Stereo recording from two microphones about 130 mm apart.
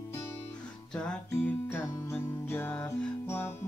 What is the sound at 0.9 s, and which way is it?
Music, 10° left (ahead or behind).